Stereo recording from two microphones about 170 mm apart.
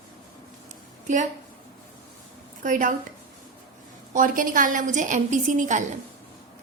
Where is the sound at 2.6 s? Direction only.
50° right (ahead or behind).